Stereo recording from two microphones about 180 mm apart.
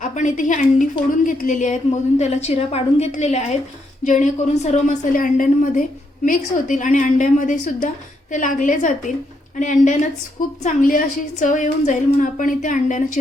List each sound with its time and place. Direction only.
0.0 s a woman's voice: 45° left (ahead or behind)